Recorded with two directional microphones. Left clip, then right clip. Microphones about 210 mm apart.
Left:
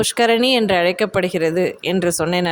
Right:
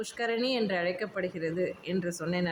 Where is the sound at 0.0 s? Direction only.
50° left (ahead or behind).